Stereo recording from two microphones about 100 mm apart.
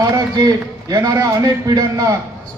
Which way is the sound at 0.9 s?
35° right (ahead or behind).